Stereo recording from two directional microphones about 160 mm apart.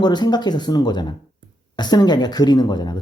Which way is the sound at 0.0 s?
25° left (ahead or behind).